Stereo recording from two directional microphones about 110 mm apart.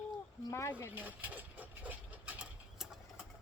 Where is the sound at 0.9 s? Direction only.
15° right (ahead or behind).